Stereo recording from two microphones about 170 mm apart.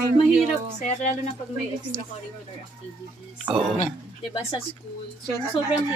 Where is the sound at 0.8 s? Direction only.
45° left (ahead or behind).